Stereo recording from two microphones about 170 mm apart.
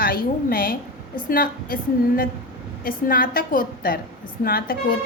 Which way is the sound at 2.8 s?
55° left (ahead or behind).